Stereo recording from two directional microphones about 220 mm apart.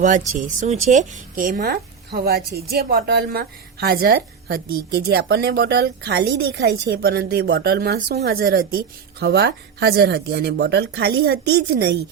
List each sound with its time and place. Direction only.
0.3 s a woman's voice: 35° right (ahead or behind)